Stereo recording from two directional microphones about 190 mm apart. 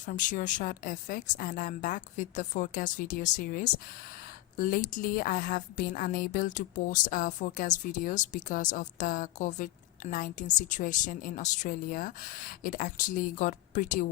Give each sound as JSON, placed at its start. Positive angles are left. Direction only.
{"t": 0.0, "sound": "a woman's voice", "side_deg": 45}